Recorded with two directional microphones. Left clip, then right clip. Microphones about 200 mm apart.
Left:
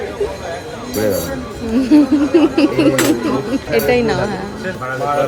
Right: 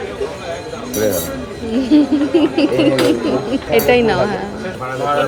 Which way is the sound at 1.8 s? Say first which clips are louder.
Left 1 dB; 10° left (ahead or behind).